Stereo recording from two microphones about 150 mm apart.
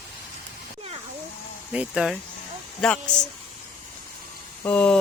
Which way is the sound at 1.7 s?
Centre (ahead or behind).